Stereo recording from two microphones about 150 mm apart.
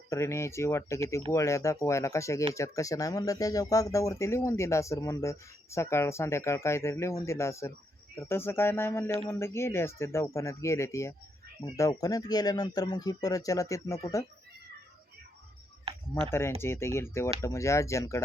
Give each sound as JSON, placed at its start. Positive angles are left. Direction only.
{"t": 0.1, "sound": "speech", "side_deg": 20}
{"t": 16.2, "sound": "speech", "side_deg": 15}